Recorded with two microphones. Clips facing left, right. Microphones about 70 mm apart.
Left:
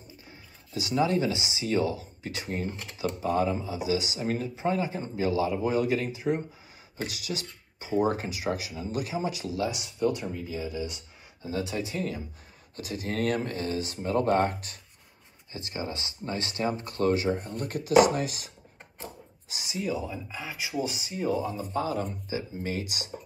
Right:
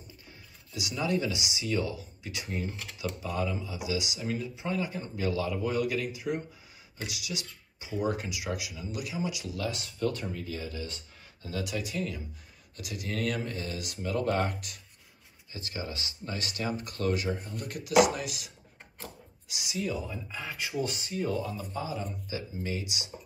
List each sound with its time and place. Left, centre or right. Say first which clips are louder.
0.7 s speech: left 5 dB; left
9.7 s speech: left 1 dB; centre
11.4 s speech: left 3 dB; left
19.5 s speech: left 1 dB; left
19.8 s speech: left 2 dB; centre
21.7 s speech: left 7 dB; left
22.3 s speech: left 2 dB; left